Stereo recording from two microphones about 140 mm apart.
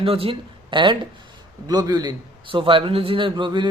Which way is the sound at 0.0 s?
40° right (ahead or behind).